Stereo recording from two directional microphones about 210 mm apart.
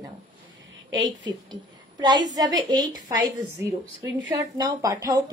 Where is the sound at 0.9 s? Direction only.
20° right (ahead or behind).